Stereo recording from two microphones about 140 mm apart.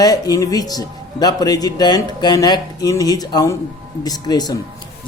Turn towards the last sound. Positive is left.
turn(degrees=30)  # may be behind; listen again after turning